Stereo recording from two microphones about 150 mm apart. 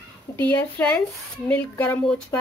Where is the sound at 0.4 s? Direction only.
10° left (ahead or behind).